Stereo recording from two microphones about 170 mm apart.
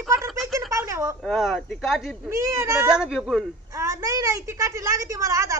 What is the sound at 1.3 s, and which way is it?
Speech, centre (ahead or behind).